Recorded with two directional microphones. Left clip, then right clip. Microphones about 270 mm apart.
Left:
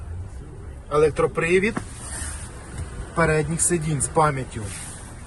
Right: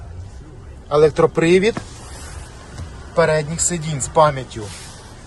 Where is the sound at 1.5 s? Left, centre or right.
Centre.